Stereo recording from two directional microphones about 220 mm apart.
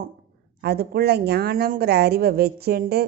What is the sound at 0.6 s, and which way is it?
Speech, 45° right (ahead or behind).